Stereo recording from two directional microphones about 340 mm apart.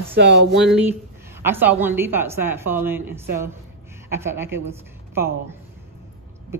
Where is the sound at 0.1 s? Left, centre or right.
Right.